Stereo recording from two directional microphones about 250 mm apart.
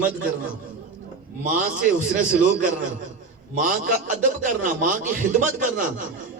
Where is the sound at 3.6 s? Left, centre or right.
Right.